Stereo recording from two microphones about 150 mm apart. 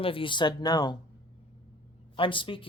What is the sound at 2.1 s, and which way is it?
Speech, 35° left (ahead or behind).